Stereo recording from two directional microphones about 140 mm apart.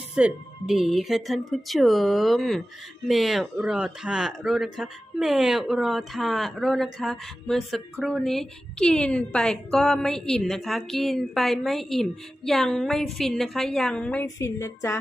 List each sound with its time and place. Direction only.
0.2 s speech: 5° right (ahead or behind)
14.3 s speech: 20° left (ahead or behind)